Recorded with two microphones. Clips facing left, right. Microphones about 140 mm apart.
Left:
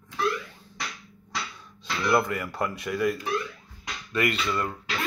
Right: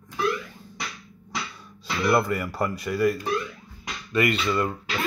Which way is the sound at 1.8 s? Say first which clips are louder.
Right 2 dB; 5° right (ahead or behind).